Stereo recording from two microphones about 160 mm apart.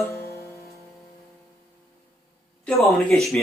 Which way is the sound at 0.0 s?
20° left (ahead or behind).